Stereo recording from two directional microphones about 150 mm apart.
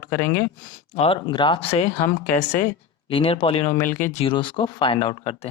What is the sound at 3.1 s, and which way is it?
Speech, 35° left (ahead or behind).